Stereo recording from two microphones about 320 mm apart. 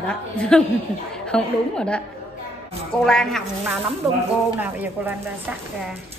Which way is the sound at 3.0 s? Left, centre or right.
Centre.